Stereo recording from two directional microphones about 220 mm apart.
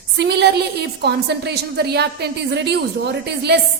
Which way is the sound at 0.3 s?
50° right (ahead or behind).